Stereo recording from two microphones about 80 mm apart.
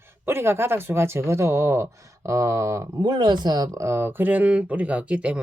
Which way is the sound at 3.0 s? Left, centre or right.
Right.